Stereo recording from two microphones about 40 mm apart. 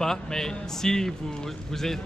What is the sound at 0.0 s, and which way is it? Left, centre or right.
Speech, centre.